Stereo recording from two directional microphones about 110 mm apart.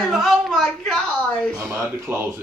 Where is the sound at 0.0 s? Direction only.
Centre (ahead or behind).